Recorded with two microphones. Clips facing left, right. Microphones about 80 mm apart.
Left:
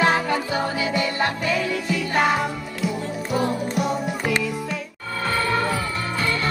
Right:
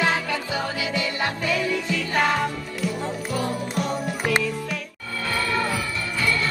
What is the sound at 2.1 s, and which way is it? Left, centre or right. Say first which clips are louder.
Music: left 1 dB; centre.